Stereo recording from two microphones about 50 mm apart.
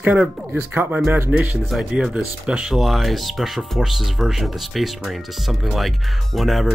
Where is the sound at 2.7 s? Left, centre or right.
Centre.